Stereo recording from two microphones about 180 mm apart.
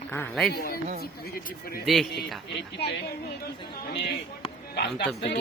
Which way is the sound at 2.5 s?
70° left (ahead or behind).